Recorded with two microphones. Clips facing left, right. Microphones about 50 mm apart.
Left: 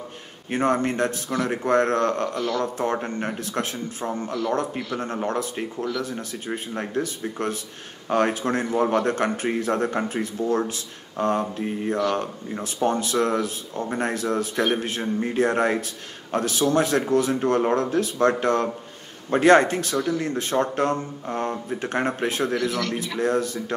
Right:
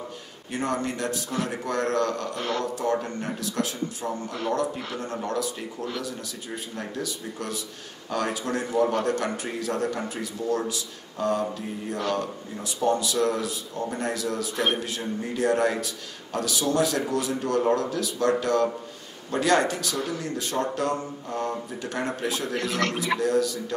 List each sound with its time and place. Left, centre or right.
0.5 s speech: left
2.3 s a man's voice: right
2.6 s speech: left
22.6 s a man's voice: right
23.1 s speech: left